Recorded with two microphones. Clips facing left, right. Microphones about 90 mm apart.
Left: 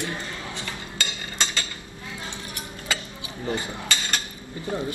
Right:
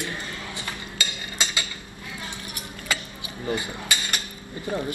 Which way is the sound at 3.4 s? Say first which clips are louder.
Even; 15° right (ahead or behind).